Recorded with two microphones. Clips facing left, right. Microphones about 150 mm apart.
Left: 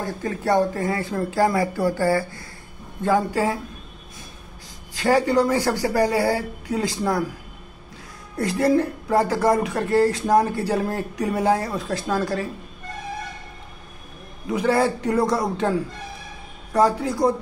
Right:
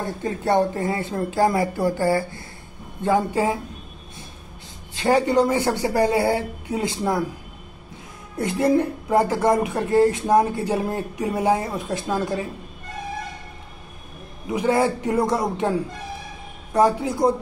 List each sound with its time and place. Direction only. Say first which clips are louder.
0.0 s speech: even; 20° right (ahead or behind)
4.9 s speech: even; 20° right (ahead or behind)
8.4 s speech: even; 20° right (ahead or behind)
14.5 s speech: even; 20° right (ahead or behind)